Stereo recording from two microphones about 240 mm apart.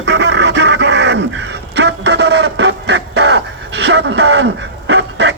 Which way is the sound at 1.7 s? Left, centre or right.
Right.